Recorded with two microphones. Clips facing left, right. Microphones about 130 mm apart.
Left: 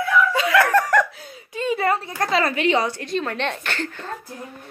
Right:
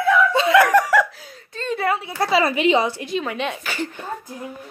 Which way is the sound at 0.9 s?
Centre (ahead or behind).